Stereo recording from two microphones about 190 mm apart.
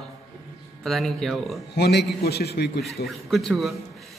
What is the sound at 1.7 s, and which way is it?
Speech, 60° left (ahead or behind).